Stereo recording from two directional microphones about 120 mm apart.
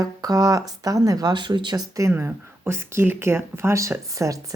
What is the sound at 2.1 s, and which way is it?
Speech, 15° right (ahead or behind).